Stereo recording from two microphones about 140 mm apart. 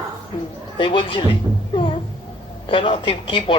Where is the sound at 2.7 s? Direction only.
40° left (ahead or behind).